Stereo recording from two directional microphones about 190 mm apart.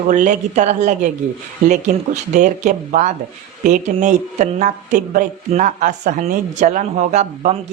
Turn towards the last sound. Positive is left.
turn(degrees=-40)  # may be behind; listen again after turning